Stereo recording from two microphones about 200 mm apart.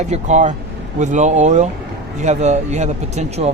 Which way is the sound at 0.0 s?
35° right (ahead or behind).